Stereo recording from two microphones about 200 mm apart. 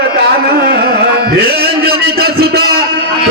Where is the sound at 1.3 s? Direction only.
50° right (ahead or behind).